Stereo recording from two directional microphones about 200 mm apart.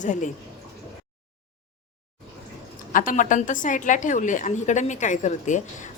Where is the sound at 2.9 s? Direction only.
40° left (ahead or behind).